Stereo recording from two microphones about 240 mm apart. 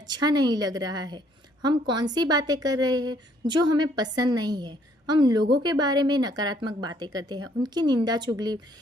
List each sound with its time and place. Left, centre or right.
0.0 s a woman's voice: centre